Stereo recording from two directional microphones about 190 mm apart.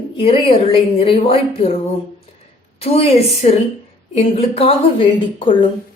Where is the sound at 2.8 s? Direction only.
30° left (ahead or behind).